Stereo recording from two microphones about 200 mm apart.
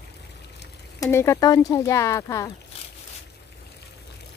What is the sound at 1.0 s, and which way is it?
Speech, 15° left (ahead or behind).